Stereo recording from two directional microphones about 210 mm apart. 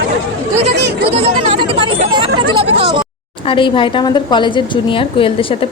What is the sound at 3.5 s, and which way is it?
A woman's voice, 25° left (ahead or behind).